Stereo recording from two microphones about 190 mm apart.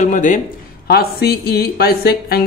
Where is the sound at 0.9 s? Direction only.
55° left (ahead or behind).